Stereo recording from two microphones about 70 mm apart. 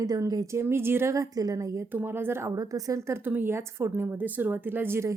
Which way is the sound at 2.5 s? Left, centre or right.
Right.